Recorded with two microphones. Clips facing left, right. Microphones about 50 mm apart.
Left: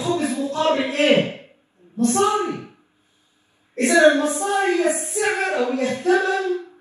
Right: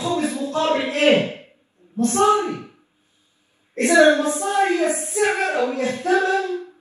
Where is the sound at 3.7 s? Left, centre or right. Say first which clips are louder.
Even; right.